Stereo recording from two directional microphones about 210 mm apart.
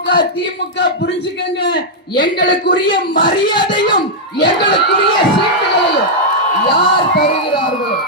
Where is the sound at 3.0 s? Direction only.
40° left (ahead or behind).